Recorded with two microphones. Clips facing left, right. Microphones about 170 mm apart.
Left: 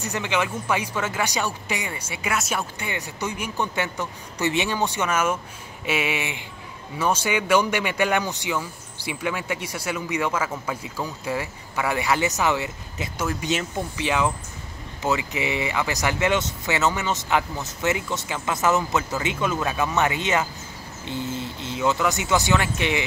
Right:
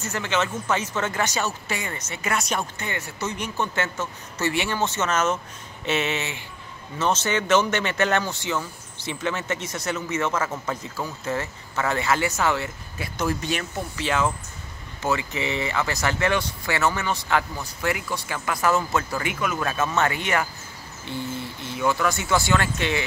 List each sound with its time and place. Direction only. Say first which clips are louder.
0.0 s speech: even; 15° left (ahead or behind)